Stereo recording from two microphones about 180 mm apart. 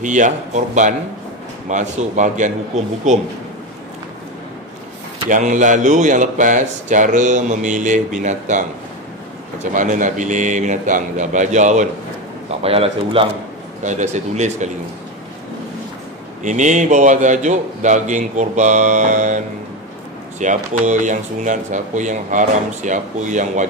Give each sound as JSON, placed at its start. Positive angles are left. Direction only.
{"t": 0.0, "sound": "speech", "side_deg": -45}
{"t": 1.7, "sound": "speech", "side_deg": -40}
{"t": 5.3, "sound": "speech", "side_deg": -45}
{"t": 13.8, "sound": "speech", "side_deg": -40}
{"t": 16.4, "sound": "speech", "side_deg": -45}